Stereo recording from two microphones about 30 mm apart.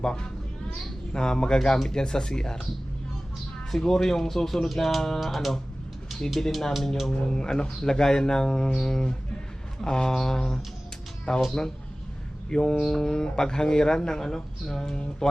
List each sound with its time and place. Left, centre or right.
0.0 s speech: left
3.7 s speech: centre
6.5 s speech: centre
7.1 s speech: left
12.5 s speech: left